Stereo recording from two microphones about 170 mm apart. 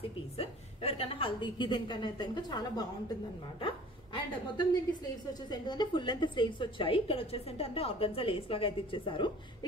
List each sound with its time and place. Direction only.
0.4 s a woman's voice: 35° left (ahead or behind)